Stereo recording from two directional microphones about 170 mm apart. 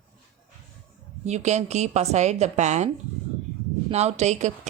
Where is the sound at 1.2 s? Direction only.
40° right (ahead or behind).